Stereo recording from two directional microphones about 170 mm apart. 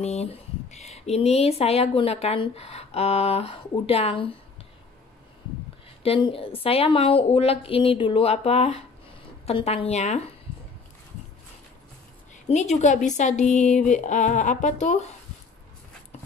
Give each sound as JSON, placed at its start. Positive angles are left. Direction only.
{"t": 0.0, "sound": "speech", "side_deg": 40}
{"t": 6.0, "sound": "speech", "side_deg": 30}
{"t": 12.4, "sound": "speech", "side_deg": 40}